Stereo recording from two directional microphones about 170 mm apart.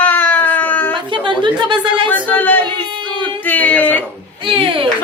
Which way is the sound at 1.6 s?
30° right (ahead or behind).